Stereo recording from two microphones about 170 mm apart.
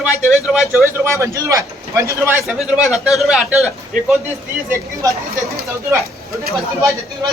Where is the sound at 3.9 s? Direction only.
50° right (ahead or behind).